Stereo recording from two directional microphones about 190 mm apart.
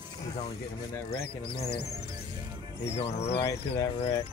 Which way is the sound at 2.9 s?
35° left (ahead or behind).